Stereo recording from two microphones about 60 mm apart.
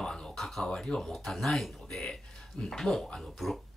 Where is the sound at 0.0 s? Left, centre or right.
Centre.